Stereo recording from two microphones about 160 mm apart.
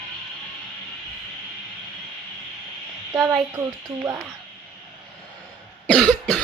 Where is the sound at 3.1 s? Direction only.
15° right (ahead or behind).